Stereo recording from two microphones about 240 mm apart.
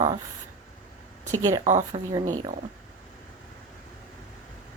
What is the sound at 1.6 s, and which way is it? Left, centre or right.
Speech, right.